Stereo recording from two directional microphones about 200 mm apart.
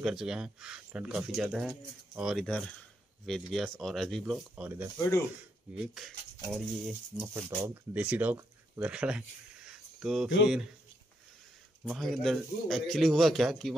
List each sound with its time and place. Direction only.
0.0 s speech: centre (ahead or behind)
9.7 s a sound: 5° right (ahead or behind)
10.4 s speech: centre (ahead or behind)
11.8 s speech: centre (ahead or behind)